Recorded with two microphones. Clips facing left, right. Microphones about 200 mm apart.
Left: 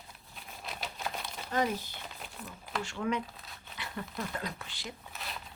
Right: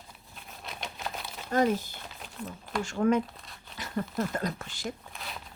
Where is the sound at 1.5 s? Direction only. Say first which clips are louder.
Right 6 dB; 50° right (ahead or behind).